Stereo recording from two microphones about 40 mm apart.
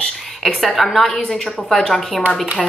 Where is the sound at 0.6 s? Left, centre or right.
Centre.